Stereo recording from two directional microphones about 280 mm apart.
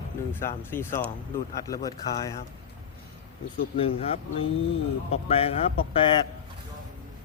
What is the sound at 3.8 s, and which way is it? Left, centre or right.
A man's voice, centre.